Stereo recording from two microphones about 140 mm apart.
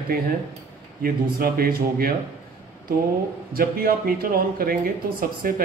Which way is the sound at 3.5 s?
90° right.